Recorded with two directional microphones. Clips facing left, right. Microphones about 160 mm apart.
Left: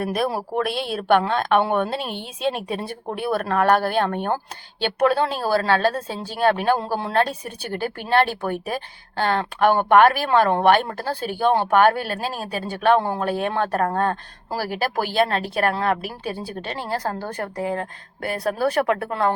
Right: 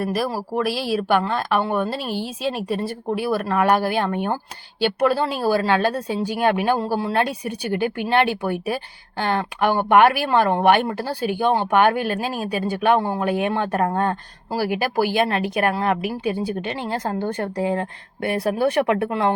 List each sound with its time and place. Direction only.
0.0 s speech: centre (ahead or behind); by 19.0 s 25° right (ahead or behind)